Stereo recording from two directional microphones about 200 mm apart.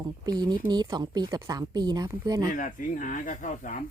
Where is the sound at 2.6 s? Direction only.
40° left (ahead or behind).